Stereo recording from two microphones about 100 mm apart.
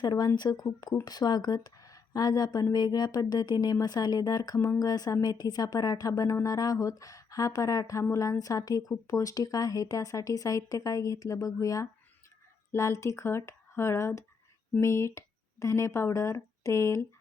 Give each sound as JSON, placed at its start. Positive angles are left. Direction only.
{"t": 0.0, "sound": "speech", "side_deg": 45}